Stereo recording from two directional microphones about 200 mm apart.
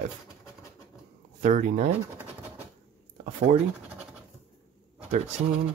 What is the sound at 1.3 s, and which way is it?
Speech, 40° right (ahead or behind).